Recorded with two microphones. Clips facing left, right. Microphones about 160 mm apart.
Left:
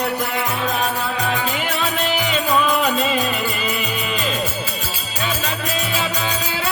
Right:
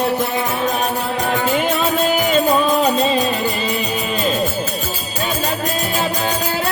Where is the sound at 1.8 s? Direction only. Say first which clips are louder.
Right 5 dB; 45° right (ahead or behind); by 3.8 s 30° right (ahead or behind).